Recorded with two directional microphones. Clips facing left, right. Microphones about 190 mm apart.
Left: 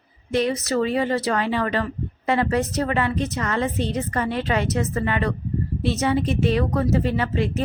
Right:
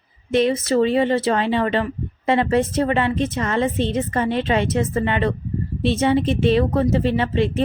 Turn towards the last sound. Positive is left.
turn(degrees=-25)  # may be behind; listen again after turning